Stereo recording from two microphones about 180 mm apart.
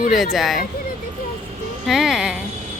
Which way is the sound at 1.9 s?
Centre (ahead or behind).